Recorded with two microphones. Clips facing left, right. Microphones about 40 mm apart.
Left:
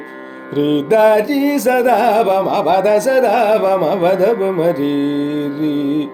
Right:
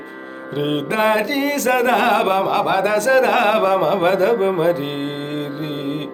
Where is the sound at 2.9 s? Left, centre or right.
Right.